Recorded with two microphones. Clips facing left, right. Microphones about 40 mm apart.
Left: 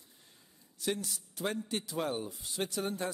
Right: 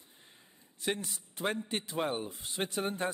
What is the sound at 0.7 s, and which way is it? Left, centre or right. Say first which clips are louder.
A man's voice: even; right.